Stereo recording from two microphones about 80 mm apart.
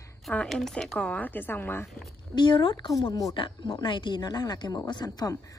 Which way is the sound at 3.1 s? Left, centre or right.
Left.